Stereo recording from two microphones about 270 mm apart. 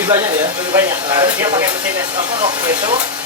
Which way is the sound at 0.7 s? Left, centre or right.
Centre.